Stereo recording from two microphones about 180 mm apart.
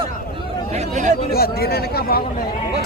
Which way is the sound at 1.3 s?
60° left (ahead or behind).